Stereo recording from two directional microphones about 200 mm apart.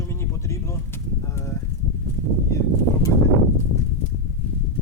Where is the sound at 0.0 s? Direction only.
15° left (ahead or behind).